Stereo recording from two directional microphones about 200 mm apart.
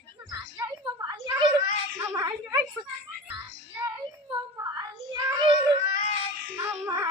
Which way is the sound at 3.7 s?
15° right (ahead or behind).